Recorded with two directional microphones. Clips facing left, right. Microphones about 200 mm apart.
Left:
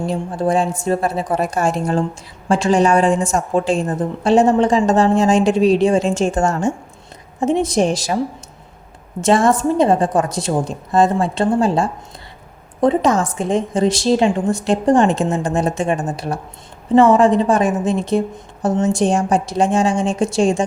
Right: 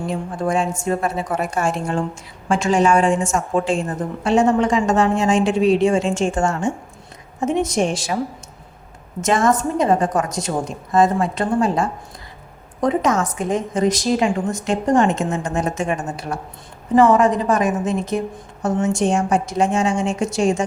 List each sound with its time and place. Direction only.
0.1 s a woman's voice: 35° left (ahead or behind)
9.2 s a woman's voice: 30° left (ahead or behind)